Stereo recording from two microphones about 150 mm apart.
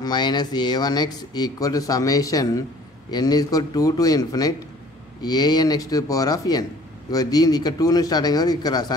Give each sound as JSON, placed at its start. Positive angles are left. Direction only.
{"t": 0.0, "sound": "speech", "side_deg": 30}